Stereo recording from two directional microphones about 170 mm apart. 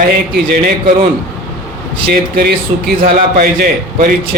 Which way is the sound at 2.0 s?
60° right (ahead or behind).